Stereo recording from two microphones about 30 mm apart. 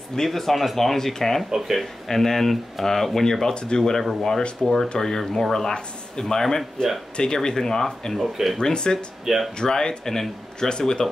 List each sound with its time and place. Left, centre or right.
0.1 s speech: centre
1.5 s speech: centre
2.0 s speech: centre
3.5 s speech: left
4.0 s speech: centre
4.6 s speech: centre
5.2 s speech: centre
5.5 s speech: centre
9.2 s speech: centre
9.6 s speech: left